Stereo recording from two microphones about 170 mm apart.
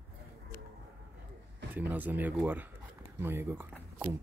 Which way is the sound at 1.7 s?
10° right (ahead or behind).